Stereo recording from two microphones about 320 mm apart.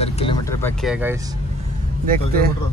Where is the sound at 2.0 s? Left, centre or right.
Right.